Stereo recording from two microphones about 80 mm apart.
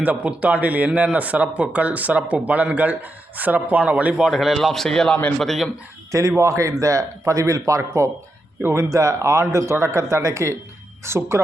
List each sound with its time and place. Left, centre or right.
0.0 s speech: centre
4.2 s a man's voice: centre
6.1 s speech: right